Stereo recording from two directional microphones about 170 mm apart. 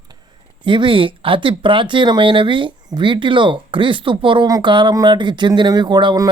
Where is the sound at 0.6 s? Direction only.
30° right (ahead or behind).